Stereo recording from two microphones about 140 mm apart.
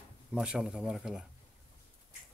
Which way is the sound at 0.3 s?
5° right (ahead or behind).